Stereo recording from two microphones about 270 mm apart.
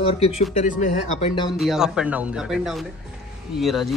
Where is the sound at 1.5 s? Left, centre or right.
Centre.